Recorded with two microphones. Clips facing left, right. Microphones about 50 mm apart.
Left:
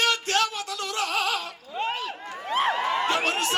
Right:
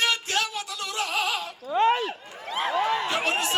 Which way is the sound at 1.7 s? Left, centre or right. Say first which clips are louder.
Right 9 dB; right.